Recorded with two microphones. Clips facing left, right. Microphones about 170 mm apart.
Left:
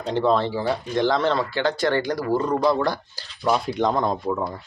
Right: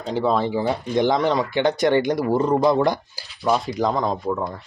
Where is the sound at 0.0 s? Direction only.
5° right (ahead or behind).